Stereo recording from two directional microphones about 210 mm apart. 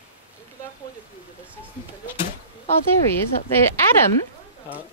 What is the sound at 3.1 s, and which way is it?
Speech, 10° left (ahead or behind).